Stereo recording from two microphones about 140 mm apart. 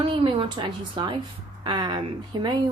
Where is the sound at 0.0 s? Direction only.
35° right (ahead or behind).